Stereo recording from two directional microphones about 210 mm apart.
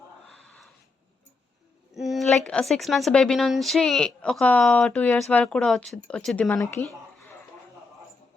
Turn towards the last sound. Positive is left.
turn(degrees=10)  # may be behind; listen again after turning